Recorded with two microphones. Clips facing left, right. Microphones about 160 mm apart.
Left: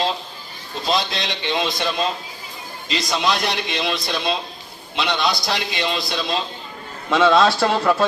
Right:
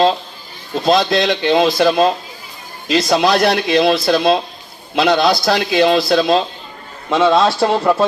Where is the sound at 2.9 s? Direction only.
65° right (ahead or behind).